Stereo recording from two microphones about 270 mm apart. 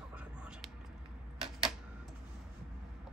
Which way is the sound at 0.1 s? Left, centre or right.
Centre.